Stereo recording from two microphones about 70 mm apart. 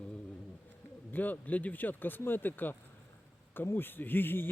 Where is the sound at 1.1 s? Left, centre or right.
Left.